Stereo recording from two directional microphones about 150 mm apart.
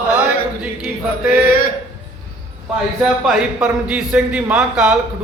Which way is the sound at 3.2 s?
5° right (ahead or behind).